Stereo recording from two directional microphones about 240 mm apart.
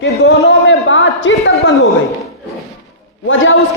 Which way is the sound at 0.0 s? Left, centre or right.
Left.